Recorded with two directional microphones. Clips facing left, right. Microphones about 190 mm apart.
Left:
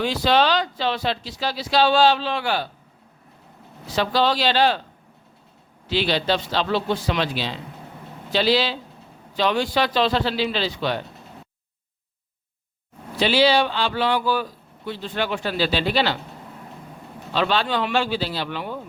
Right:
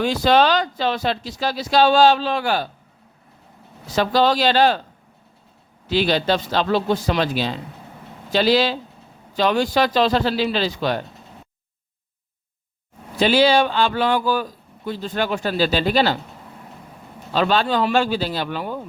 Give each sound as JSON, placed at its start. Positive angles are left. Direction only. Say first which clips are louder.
{"t": 0.0, "sound": "speech", "louder": "right 3 dB", "side_deg": -45}
{"t": 3.9, "sound": "speech", "louder": "right 3 dB", "side_deg": -45}
{"t": 5.9, "sound": "speech", "louder": "right 3 dB", "side_deg": -45}
{"t": 13.1, "sound": "speech", "louder": "right 2 dB", "side_deg": -45}
{"t": 17.3, "sound": "speech", "louder": "right 3 dB", "side_deg": -45}